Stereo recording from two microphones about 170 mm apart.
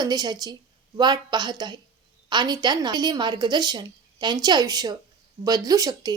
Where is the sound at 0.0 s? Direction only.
25° right (ahead or behind).